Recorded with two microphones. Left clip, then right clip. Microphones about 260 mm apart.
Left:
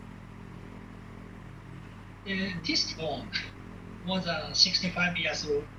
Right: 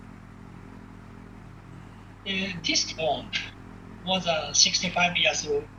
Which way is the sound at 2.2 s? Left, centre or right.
Centre.